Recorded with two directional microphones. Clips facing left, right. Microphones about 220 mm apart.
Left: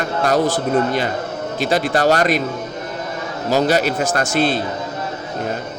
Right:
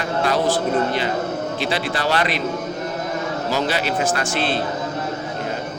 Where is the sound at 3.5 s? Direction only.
45° left (ahead or behind).